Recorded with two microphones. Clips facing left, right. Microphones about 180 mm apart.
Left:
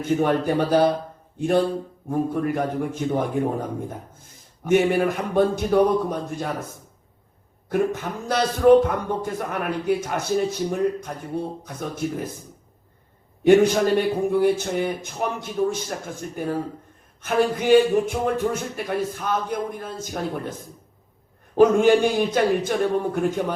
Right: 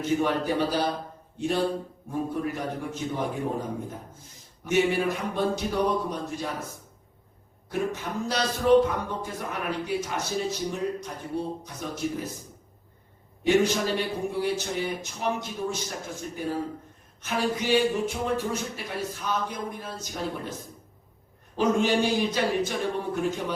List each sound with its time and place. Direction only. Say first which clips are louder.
0.0 s speech: left 4 dB; 50° left (ahead or behind)
7.7 s speech: left 6 dB; 50° left (ahead or behind)
13.4 s speech: left 7 dB; 55° left (ahead or behind)
21.5 s speech: left 8 dB; 50° left (ahead or behind)